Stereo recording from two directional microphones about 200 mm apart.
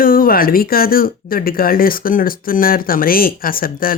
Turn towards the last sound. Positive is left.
turn(degrees=45)  # may be behind; listen again after turning